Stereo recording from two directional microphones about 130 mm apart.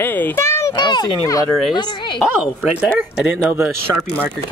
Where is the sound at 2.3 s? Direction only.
10° right (ahead or behind).